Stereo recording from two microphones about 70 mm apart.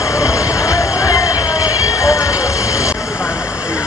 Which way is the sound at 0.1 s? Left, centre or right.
Left.